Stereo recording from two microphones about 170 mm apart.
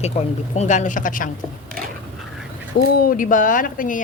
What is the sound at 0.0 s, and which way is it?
A woman's voice, 40° left (ahead or behind).